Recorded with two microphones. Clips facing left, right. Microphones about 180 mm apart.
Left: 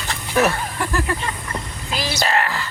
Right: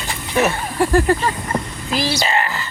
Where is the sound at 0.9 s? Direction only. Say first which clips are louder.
Right 9 dB; 35° right (ahead or behind).